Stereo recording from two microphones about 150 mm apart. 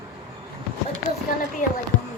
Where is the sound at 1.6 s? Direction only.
60° left (ahead or behind).